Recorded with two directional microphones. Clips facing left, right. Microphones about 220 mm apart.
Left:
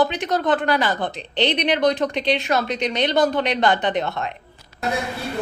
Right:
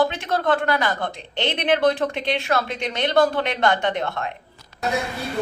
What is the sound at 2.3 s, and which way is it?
A woman's voice, 20° left (ahead or behind).